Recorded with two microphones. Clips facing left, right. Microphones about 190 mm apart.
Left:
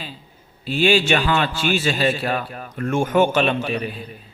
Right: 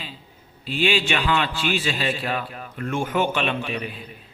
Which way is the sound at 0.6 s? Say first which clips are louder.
Left 5 dB; 45° left (ahead or behind).